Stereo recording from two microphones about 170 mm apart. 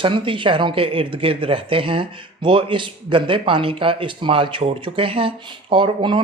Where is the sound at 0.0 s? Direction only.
30° right (ahead or behind).